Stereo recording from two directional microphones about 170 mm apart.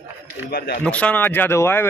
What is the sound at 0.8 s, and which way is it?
Speech, 10° left (ahead or behind).